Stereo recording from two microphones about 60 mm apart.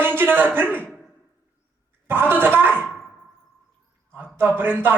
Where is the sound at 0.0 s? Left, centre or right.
Right.